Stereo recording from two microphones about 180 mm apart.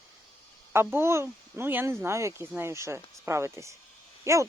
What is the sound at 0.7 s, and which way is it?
Speech, 15° right (ahead or behind).